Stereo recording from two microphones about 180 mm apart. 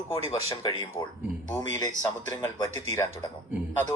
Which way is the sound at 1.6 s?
20° left (ahead or behind).